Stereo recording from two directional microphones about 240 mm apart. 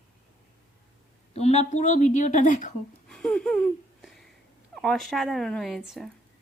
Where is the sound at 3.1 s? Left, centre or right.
Centre.